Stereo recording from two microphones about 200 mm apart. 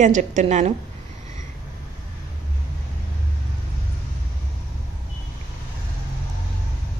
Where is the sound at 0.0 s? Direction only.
40° right (ahead or behind).